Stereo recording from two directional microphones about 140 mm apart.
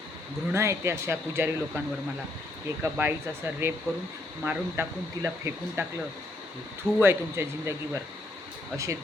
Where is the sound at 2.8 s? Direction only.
15° right (ahead or behind).